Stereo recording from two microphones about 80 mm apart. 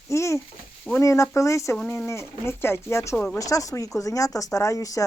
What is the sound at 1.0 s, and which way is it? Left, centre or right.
Speech, left.